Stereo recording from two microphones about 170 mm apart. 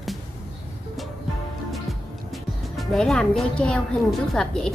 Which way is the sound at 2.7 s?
5° left (ahead or behind).